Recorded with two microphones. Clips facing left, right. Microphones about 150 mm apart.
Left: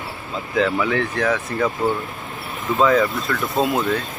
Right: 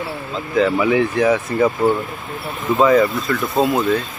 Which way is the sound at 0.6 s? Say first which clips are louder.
Right 4 dB; 5° right (ahead or behind).